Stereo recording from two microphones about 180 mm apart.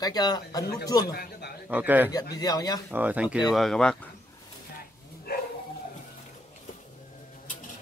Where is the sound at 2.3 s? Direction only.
20° left (ahead or behind).